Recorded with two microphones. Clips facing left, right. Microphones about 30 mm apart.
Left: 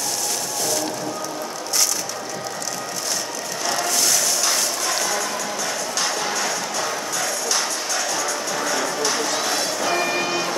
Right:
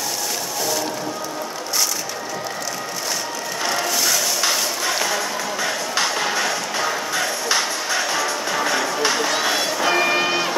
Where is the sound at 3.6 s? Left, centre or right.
Centre.